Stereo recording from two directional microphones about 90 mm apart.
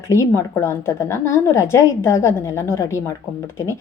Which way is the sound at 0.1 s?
35° left (ahead or behind).